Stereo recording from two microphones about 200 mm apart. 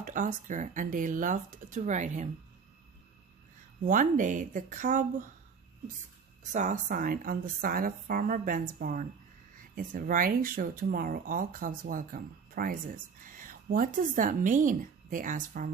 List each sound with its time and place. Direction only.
0.0 s speech: 40° right (ahead or behind)
3.8 s speech: 40° right (ahead or behind)
6.5 s speech: 40° right (ahead or behind)